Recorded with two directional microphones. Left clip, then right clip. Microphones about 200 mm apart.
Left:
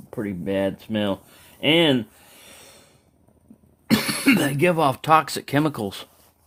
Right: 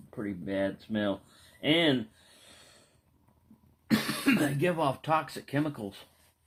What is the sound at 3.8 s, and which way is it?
Speech, 65° left (ahead or behind).